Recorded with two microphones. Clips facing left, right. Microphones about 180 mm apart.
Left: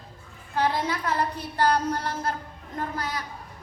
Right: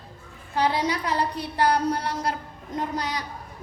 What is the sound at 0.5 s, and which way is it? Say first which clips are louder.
A woman's voice: right 2 dB; 15° right (ahead or behind).